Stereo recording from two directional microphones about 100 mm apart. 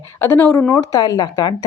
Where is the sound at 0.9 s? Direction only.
40° left (ahead or behind).